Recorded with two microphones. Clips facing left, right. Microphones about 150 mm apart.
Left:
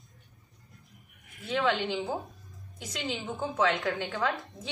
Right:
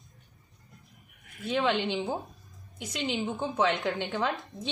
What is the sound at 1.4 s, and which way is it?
A woman's voice, 20° right (ahead or behind).